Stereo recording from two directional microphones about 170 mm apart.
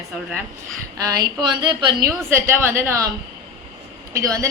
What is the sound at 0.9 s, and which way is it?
Speech, 20° right (ahead or behind).